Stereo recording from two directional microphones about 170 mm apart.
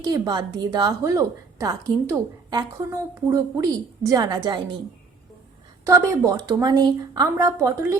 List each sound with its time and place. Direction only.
0.0 s a woman's voice: 25° right (ahead or behind)
5.8 s a woman's voice: 20° right (ahead or behind)